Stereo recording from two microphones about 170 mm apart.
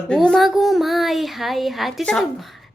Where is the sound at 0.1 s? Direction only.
5° left (ahead or behind).